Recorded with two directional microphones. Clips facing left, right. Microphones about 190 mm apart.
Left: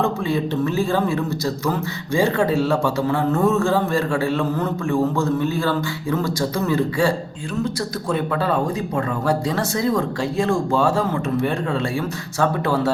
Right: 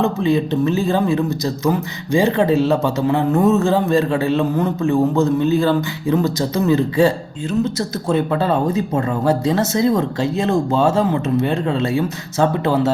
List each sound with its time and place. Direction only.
0.0 s a man's voice: 20° right (ahead or behind)
8.1 s a man's voice: 25° right (ahead or behind)